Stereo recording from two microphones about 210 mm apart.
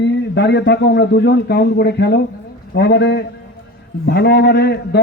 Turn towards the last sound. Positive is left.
turn(degrees=55)  # may be behind; listen again after turning